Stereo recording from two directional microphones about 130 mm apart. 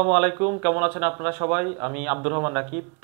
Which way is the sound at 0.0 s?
20° right (ahead or behind).